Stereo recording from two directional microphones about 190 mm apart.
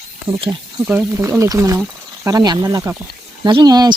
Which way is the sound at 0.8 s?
10° right (ahead or behind).